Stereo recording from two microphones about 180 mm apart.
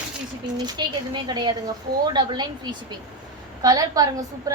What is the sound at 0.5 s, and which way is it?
A woman's voice, 20° right (ahead or behind).